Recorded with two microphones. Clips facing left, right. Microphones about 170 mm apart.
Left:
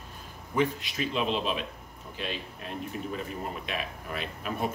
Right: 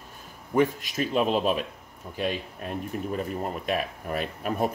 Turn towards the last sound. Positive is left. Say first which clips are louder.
# right 5 dB
turn(degrees=-45)  # may be behind; listen again after turning